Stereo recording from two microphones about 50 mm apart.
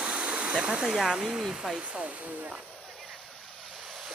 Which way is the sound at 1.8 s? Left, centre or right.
Right.